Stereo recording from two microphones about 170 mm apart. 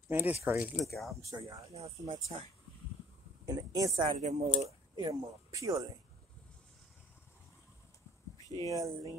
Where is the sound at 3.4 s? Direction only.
20° right (ahead or behind).